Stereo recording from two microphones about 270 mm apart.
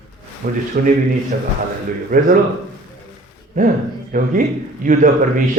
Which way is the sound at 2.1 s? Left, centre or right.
Right.